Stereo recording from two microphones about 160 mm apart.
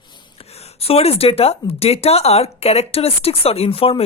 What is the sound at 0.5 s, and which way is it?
Speech, 40° left (ahead or behind).